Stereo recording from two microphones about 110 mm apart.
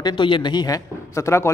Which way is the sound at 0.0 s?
45° left (ahead or behind).